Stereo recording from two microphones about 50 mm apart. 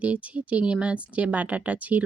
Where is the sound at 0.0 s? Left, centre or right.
Right.